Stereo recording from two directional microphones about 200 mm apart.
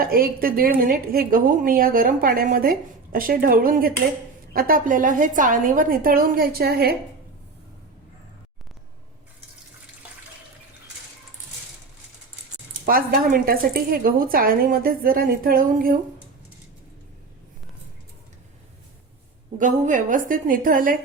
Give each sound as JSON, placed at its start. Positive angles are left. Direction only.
{"t": 0.0, "sound": "a woman's voice", "side_deg": -45}
{"t": 12.8, "sound": "a woman's voice", "side_deg": -45}
{"t": 19.5, "sound": "a woman's voice", "side_deg": -40}